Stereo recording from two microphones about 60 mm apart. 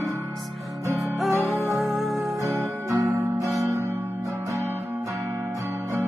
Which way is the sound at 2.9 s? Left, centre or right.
Right.